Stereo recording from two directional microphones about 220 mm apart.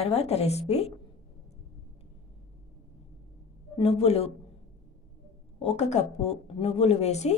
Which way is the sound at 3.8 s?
30° left (ahead or behind).